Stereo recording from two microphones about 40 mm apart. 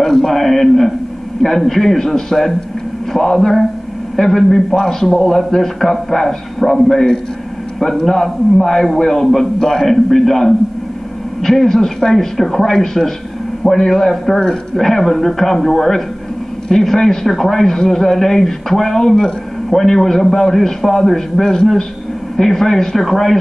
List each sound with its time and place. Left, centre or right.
0.0 s speech: centre